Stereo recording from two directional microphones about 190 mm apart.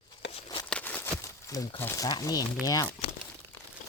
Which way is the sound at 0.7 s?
5° left (ahead or behind).